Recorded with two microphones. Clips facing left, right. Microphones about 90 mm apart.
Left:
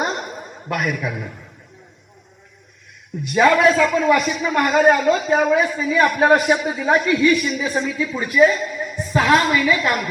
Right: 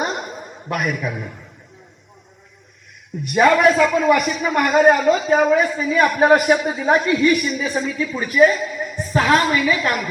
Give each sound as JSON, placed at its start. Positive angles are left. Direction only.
{"t": 0.0, "sound": "a sound", "side_deg": 0}
{"t": 1.1, "sound": "a woman's voice", "side_deg": -5}
{"t": 3.3, "sound": "a woman's voice", "side_deg": -5}
{"t": 6.6, "sound": "speech", "side_deg": -20}
{"t": 6.8, "sound": "a woman's voice", "side_deg": 0}
{"t": 7.3, "sound": "speech", "side_deg": -10}
{"t": 7.7, "sound": "a woman's voice", "side_deg": 0}